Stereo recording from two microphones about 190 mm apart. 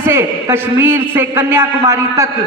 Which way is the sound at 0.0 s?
10° right (ahead or behind).